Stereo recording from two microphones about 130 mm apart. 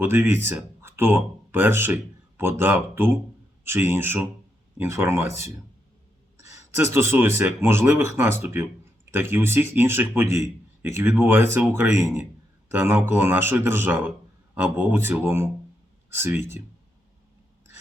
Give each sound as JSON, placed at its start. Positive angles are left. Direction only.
{"t": 0.0, "sound": "speech", "side_deg": -15}
{"t": 6.7, "sound": "speech", "side_deg": -20}
{"t": 12.7, "sound": "speech", "side_deg": -15}